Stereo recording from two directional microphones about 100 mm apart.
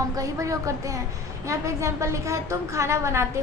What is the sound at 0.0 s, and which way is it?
A woman's voice, 35° right (ahead or behind).